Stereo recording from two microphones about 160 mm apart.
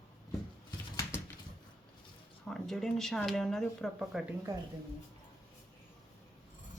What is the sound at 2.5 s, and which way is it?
Speech, centre (ahead or behind).